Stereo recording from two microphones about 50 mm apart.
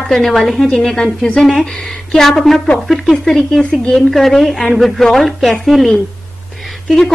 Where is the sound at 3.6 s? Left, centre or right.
Centre.